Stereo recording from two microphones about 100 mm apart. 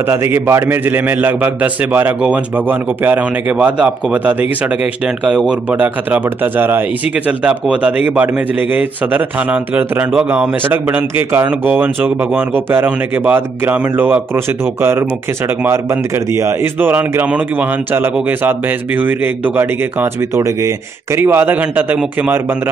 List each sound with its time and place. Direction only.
0.0 s speech: 25° right (ahead or behind)